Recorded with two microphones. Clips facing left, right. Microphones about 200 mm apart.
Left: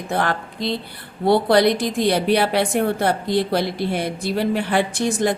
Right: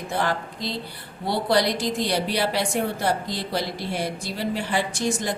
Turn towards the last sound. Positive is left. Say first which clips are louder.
# left 6 dB
turn(degrees=60)  # may be behind; listen again after turning